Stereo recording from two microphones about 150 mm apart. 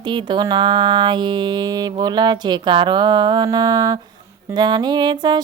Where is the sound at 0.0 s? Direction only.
30° right (ahead or behind).